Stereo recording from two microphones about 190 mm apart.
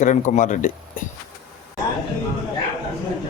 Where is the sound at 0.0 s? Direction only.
40° left (ahead or behind).